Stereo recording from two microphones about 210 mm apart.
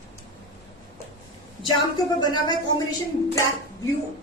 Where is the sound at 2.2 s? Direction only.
20° left (ahead or behind).